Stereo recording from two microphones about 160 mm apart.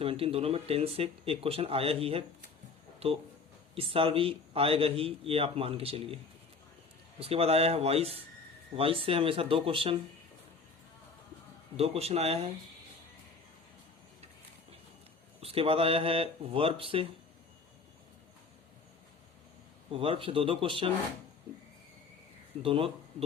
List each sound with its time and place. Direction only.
0.0 s speech: 35° right (ahead or behind)
7.2 s speech: 40° right (ahead or behind)
11.8 s speech: 40° right (ahead or behind)
15.4 s speech: 35° right (ahead or behind)
19.9 s speech: 35° right (ahead or behind)
22.6 s speech: 35° right (ahead or behind)